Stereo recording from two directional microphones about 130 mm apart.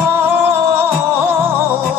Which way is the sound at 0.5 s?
20° right (ahead or behind).